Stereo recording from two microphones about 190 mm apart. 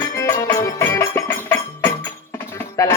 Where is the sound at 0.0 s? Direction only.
15° left (ahead or behind).